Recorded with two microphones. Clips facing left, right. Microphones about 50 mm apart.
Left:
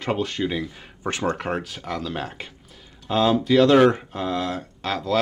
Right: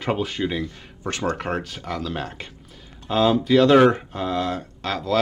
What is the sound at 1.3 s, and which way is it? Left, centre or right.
Speech, centre.